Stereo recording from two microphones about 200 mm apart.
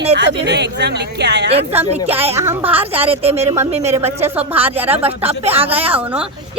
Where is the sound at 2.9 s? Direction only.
30° right (ahead or behind).